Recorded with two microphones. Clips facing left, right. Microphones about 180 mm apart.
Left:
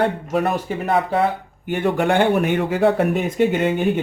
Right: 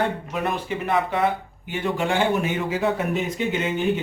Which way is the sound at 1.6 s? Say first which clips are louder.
Left 6 dB; 55° left (ahead or behind).